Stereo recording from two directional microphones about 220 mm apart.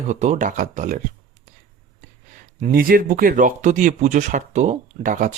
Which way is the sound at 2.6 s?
40° right (ahead or behind).